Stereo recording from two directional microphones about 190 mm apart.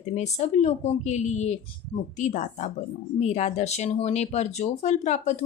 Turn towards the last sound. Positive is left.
turn(degrees=40)  # may be behind; listen again after turning